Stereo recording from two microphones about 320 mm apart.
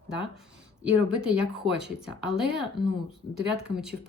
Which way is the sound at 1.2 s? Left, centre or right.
Centre.